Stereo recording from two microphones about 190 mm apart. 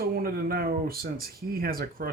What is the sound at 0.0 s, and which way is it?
Speech, 55° right (ahead or behind).